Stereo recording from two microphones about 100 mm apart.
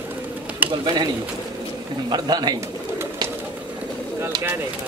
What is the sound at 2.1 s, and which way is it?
Speech, 45° right (ahead or behind).